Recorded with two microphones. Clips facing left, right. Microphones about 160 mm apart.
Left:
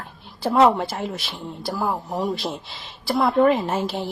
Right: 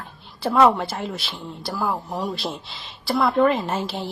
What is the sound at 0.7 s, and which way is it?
Speech, centre (ahead or behind).